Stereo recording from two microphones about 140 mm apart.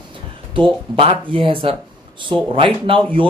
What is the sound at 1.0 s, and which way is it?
Speech, 40° right (ahead or behind).